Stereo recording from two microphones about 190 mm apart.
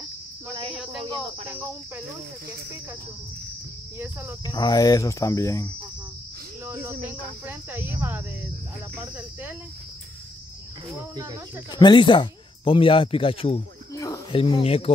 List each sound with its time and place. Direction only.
1.5 s speech: 10° right (ahead or behind)
4.0 s speech: 10° right (ahead or behind)
4.5 s speech: 20° left (ahead or behind)
6.6 s speech: 10° right (ahead or behind)
11.0 s speech: 15° right (ahead or behind)
11.7 s speech: 25° left (ahead or behind)
13.9 s cricket: 15° left (ahead or behind)
14.4 s speech: 30° left (ahead or behind)